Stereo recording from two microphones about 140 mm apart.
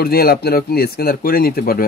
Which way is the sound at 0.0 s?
90° left.